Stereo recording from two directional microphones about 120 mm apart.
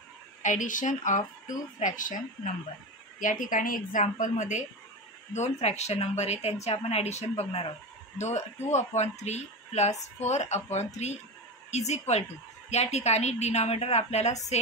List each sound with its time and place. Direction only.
0.4 s speech: 90° left
5.3 s a woman's voice: 65° left (ahead or behind)